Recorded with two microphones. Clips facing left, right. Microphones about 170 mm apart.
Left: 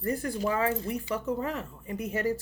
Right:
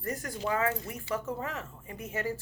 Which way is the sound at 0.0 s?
30° left (ahead or behind).